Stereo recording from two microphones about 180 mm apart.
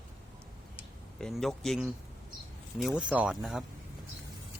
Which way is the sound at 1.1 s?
Centre (ahead or behind).